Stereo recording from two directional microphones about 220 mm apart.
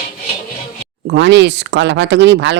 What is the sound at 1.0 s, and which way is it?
Speech, 55° right (ahead or behind).